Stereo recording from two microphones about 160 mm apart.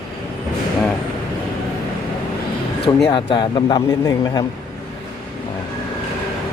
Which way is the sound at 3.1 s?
30° left (ahead or behind).